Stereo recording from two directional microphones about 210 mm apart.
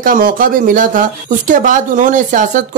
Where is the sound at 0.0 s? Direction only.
40° right (ahead or behind).